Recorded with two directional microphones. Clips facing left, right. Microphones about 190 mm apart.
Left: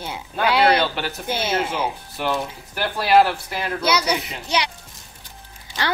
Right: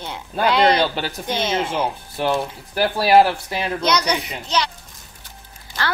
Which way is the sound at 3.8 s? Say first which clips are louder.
Even; 5° left (ahead or behind).